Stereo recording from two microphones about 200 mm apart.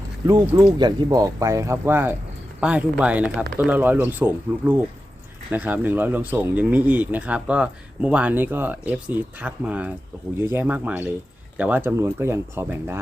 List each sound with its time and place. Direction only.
0.3 s speech: 20° right (ahead or behind)